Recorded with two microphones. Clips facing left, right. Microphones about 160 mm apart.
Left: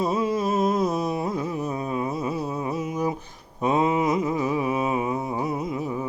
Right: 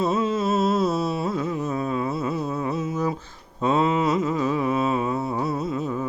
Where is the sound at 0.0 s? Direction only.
15° left (ahead or behind).